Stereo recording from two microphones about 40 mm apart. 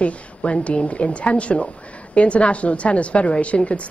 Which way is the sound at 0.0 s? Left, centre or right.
Left.